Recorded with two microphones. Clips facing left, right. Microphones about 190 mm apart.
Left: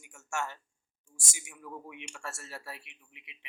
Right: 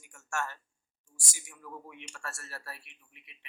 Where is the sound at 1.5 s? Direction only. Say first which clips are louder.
Left 2 dB; 15° left (ahead or behind).